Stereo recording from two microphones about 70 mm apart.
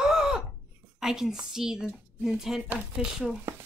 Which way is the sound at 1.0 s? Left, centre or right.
Centre.